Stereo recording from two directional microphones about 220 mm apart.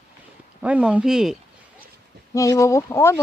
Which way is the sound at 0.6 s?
5° right (ahead or behind).